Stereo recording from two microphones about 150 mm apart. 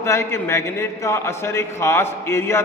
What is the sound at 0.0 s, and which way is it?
A man's voice, 20° left (ahead or behind).